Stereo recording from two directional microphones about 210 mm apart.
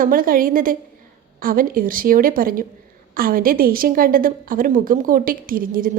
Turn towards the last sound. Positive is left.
turn(degrees=-40)  # may be behind; listen again after turning